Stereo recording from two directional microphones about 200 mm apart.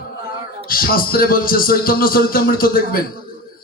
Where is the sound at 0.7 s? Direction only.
45° left (ahead or behind).